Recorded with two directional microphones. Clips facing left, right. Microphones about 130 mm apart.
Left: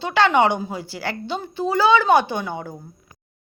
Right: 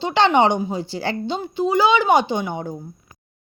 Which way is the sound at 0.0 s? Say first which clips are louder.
Right 1 dB; 25° right (ahead or behind).